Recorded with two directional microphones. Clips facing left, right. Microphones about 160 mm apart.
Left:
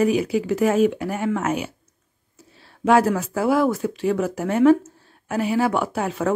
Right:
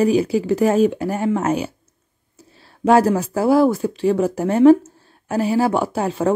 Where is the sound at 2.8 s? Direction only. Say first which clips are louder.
Right 3 dB; 35° right (ahead or behind).